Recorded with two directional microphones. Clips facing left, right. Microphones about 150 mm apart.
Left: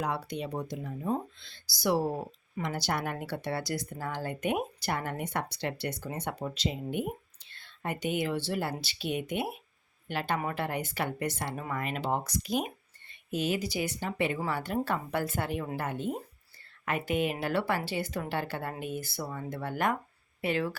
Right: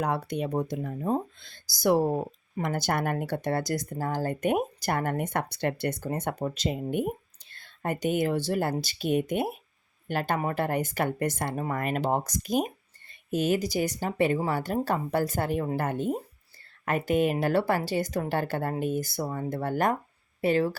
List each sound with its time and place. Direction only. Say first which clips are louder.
0.0 s a woman's voice: right 5 dB; 50° right (ahead or behind)